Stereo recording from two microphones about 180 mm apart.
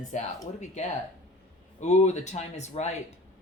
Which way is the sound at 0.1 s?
40° left (ahead or behind).